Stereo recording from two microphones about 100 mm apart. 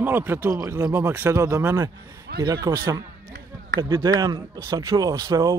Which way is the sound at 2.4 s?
40° right (ahead or behind).